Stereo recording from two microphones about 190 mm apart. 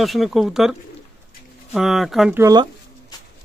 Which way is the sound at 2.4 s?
20° right (ahead or behind).